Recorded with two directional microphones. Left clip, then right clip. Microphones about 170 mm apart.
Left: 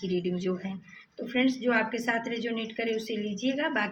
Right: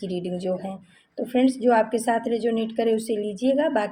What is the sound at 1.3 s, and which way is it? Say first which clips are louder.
A woman's voice: right 6 dB; 55° right (ahead or behind).